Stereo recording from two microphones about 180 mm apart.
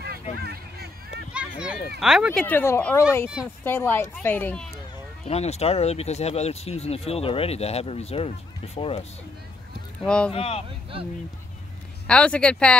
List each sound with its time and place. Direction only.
0.4 s a sound: 60° right (ahead or behind)
1.3 s a sound: 5° right (ahead or behind)
2.0 s speech: 5° right (ahead or behind)
2.4 s speech: 10° left (ahead or behind)
5.2 s speech: 35° left (ahead or behind)
10.0 s speech: 5° left (ahead or behind)
10.3 s speech: 35° left (ahead or behind)
12.1 s speech: 5° left (ahead or behind)